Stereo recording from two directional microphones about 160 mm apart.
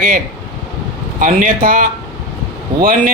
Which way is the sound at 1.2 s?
55° right (ahead or behind).